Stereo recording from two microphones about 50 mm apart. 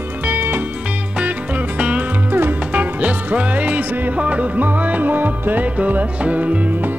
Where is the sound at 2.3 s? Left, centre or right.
Right.